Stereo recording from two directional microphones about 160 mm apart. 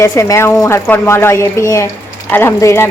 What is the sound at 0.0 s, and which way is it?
A woman's voice, 20° left (ahead or behind).